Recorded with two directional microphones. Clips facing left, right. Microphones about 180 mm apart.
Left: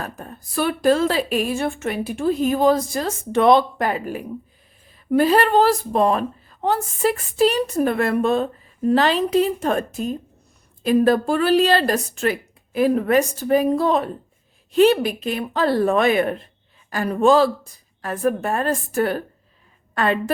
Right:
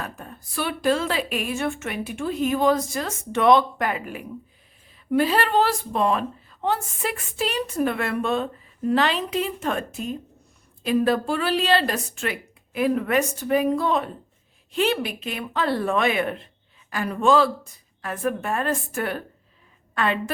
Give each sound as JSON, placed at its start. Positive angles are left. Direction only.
{"t": 0.0, "sound": "a woman's voice", "side_deg": 40}